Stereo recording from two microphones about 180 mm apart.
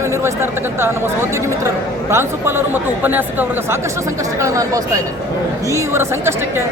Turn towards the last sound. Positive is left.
turn(degrees=-15)  # may be behind; listen again after turning